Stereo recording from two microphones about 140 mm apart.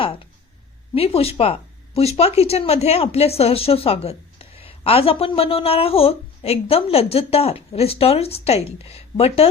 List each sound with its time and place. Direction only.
0.9 s speech: 45° left (ahead or behind)